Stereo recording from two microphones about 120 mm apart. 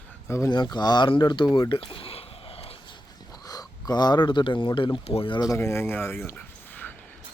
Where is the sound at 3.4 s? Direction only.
35° left (ahead or behind); by 5.4 s 50° left (ahead or behind).